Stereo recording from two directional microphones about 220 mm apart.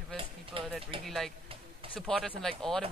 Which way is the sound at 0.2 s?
25° right (ahead or behind).